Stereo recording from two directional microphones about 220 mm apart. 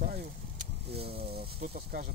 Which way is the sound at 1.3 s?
40° right (ahead or behind).